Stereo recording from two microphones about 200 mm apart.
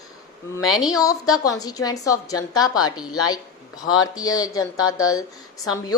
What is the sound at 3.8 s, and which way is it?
Speech, 90° left.